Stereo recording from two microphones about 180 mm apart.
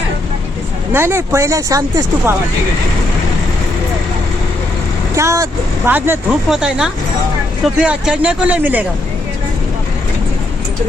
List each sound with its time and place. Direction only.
0.9 s speech: 15° right (ahead or behind)
5.1 s speech: 15° right (ahead or behind)